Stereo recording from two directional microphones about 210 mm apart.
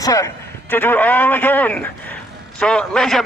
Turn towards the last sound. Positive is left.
turn(degrees=0)  # may be behind; listen again after turning